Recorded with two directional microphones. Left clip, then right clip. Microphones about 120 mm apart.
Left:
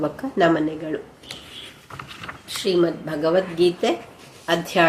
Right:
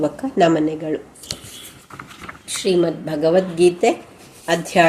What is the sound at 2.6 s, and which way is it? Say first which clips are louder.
A woman's voice: right 2 dB; 40° right (ahead or behind).